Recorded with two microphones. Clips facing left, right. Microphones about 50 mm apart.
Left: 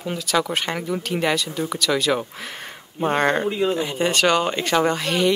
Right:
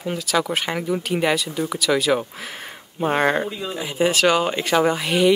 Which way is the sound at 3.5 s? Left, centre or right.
Left.